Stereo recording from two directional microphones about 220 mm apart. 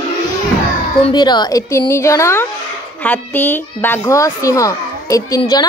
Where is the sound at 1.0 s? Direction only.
20° left (ahead or behind).